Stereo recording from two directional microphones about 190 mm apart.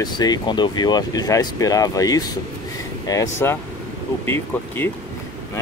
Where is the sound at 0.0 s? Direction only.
20° left (ahead or behind).